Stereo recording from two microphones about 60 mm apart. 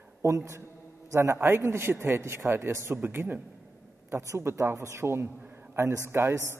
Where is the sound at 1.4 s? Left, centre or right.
Right.